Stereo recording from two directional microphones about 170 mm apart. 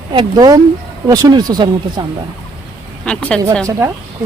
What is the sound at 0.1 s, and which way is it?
Speech, 25° right (ahead or behind).